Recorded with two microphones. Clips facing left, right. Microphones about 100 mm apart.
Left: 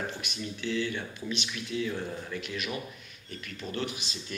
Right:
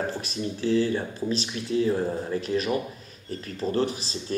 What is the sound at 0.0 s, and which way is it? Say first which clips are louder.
Speech: right 7 dB; 35° right (ahead or behind).